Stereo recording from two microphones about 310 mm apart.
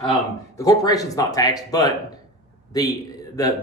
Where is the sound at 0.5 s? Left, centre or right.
Centre.